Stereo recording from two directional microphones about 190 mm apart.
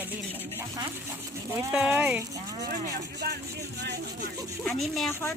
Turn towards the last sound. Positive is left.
turn(degrees=15)  # may be behind; listen again after turning